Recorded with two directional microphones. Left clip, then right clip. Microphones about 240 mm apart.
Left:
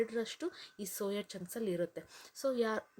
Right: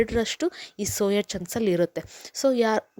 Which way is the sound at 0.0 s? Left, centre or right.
Right.